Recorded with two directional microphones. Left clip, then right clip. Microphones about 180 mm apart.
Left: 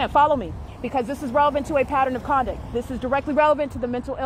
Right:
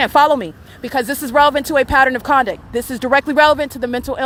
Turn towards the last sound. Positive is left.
turn(degrees=-30)  # may be behind; listen again after turning